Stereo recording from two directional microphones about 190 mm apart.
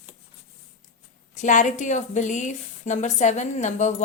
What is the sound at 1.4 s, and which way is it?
A woman's voice, 40° left (ahead or behind).